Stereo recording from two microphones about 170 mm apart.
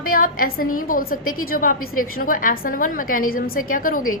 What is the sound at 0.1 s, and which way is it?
A woman's voice, 55° left (ahead or behind).